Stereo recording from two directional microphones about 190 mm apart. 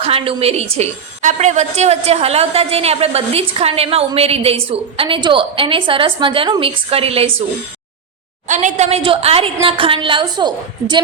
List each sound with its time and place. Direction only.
0.0 s a woman's voice: 30° right (ahead or behind)
8.4 s a woman's voice: 40° right (ahead or behind); by 11.0 s 25° right (ahead or behind)